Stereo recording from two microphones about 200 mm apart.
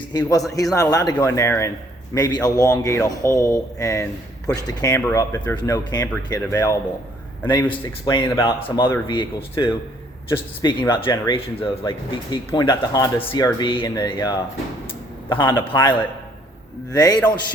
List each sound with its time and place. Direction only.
0.1 s speech: 20° left (ahead or behind)
7.7 s speech: 25° left (ahead or behind)